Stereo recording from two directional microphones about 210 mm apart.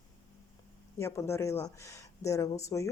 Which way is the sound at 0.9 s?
15° left (ahead or behind).